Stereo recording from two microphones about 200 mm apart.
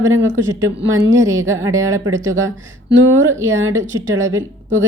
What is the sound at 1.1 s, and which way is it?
Speech, 15° right (ahead or behind).